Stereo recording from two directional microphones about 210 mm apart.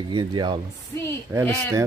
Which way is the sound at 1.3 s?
10° right (ahead or behind).